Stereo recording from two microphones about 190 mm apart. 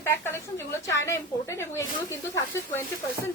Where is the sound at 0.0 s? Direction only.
15° left (ahead or behind).